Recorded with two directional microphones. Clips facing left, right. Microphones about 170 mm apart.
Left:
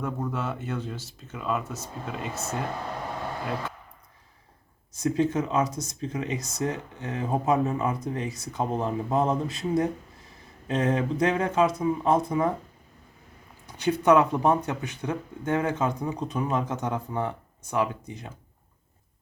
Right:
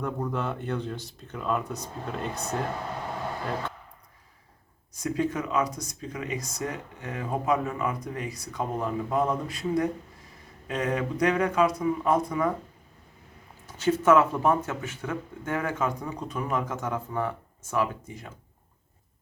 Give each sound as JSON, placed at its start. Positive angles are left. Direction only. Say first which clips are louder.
{"t": 0.0, "sound": "speech", "louder": "even", "side_deg": 5}
{"t": 4.9, "sound": "speech", "louder": "left 3 dB", "side_deg": 25}
{"t": 13.7, "sound": "speech", "louder": "even", "side_deg": 15}